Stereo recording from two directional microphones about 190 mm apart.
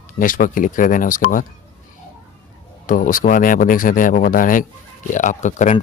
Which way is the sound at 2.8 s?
45° left (ahead or behind).